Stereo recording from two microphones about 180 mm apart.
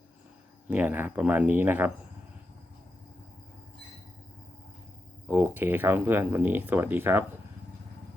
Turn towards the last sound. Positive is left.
turn(degrees=-10)  # may be behind; listen again after turning